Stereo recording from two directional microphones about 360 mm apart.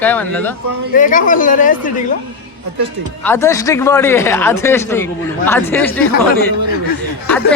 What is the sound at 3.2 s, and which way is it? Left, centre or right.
Speech, centre.